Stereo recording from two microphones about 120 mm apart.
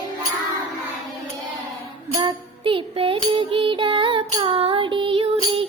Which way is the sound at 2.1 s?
40° right (ahead or behind).